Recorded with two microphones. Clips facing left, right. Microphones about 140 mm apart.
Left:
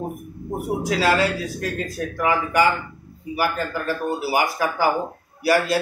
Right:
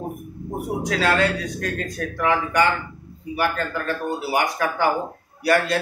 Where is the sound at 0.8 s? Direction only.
5° left (ahead or behind).